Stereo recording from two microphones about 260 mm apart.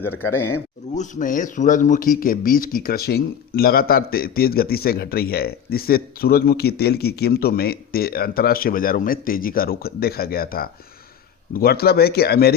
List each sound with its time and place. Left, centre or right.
0.2 s speech: centre
0.9 s a man's voice: left